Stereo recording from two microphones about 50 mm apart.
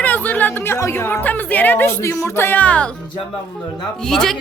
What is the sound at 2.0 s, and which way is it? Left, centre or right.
Music, left.